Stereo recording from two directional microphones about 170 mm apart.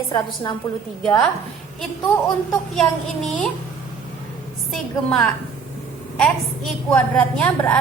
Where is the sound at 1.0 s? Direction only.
5° left (ahead or behind).